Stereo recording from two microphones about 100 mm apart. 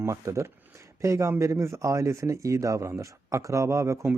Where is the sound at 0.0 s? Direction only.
30° right (ahead or behind).